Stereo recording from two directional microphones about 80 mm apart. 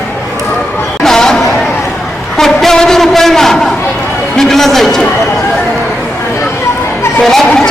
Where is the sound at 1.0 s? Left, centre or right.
Centre.